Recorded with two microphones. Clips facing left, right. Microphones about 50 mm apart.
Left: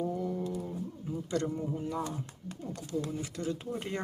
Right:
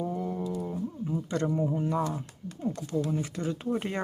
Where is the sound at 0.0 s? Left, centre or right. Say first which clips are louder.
Right 1 dB; right.